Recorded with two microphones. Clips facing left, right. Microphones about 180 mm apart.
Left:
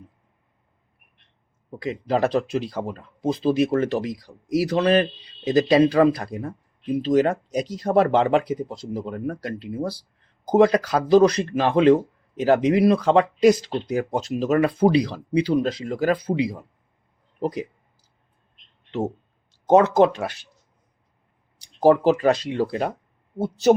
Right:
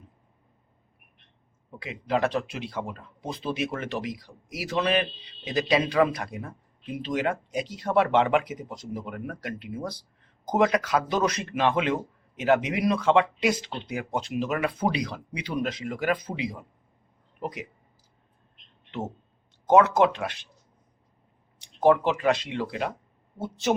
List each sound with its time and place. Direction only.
1.8 s speech: 40° left (ahead or behind)
19.6 s speech: 35° left (ahead or behind)
21.6 s speech: 35° left (ahead or behind)